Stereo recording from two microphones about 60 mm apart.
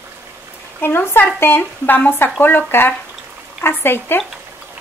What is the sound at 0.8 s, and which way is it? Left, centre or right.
Speech, left.